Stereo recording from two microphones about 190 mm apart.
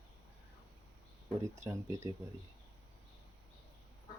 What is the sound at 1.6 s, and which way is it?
Speech, 15° right (ahead or behind).